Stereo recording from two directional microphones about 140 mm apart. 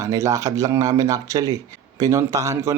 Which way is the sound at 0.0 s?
25° right (ahead or behind).